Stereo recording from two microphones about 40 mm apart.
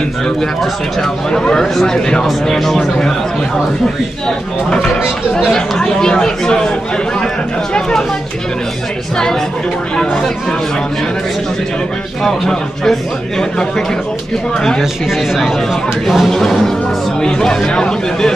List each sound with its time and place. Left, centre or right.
1.3 s speech: centre
5.9 s speech: centre
12.2 s speech: centre
14.8 s speech: centre
16.3 s speech: centre
17.2 s speech: centre